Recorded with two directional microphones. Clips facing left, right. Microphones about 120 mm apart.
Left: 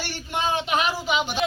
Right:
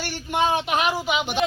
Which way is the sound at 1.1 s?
15° right (ahead or behind).